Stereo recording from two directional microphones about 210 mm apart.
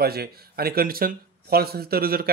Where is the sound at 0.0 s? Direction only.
45° right (ahead or behind).